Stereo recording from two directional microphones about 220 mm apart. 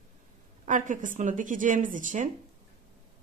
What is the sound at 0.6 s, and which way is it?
Speech, 35° right (ahead or behind).